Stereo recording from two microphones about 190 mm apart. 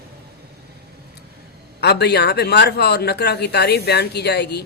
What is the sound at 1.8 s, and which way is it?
Speech, 60° left (ahead or behind).